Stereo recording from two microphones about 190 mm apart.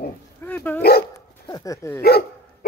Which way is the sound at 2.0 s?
55° left (ahead or behind).